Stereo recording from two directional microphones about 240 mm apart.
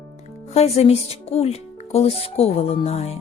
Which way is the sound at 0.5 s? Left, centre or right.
Left.